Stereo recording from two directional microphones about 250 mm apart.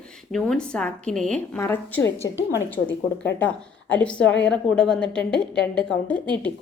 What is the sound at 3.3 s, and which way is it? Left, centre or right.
A woman's voice, centre.